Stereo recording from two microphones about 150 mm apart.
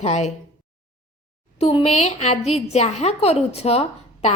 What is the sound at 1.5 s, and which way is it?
A woman's voice, 40° left (ahead or behind).